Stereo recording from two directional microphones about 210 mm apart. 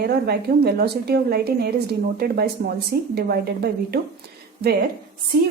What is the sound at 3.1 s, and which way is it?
Speech, 50° right (ahead or behind).